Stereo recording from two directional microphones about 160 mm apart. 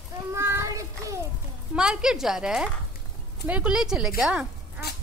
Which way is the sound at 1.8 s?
5° right (ahead or behind).